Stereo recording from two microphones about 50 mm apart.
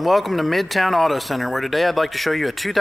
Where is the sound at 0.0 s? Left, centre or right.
Centre.